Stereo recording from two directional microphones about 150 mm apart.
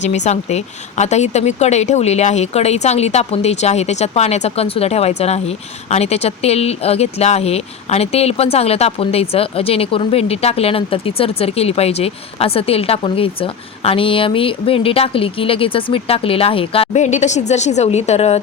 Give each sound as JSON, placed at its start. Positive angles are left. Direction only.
{"t": 0.0, "sound": "speech", "side_deg": 50}